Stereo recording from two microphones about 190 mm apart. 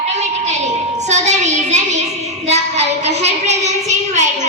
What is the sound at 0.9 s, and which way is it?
Child singing, 35° right (ahead or behind).